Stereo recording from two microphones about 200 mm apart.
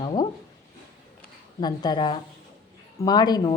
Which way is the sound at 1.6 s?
20° left (ahead or behind).